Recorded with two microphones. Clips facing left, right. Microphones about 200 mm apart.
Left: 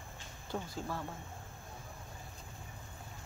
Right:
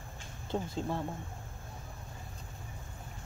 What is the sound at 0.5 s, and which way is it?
Speech, 25° right (ahead or behind).